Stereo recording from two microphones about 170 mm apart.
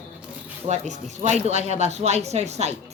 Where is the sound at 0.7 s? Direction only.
45° right (ahead or behind).